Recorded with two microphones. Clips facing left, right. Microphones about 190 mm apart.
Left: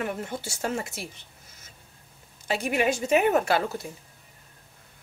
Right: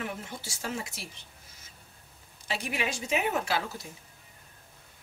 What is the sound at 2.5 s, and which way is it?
Speech, 50° left (ahead or behind).